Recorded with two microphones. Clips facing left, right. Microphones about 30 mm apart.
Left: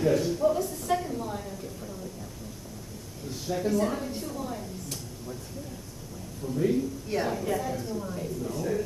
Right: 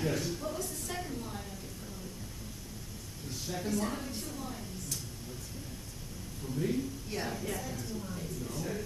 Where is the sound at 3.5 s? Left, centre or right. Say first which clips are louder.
Left 8 dB; centre.